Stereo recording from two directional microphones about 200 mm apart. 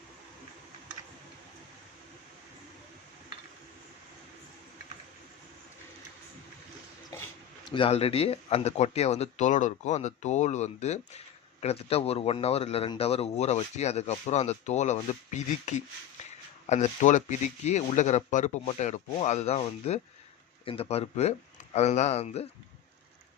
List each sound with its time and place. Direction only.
7.7 s a man's voice: 30° left (ahead or behind)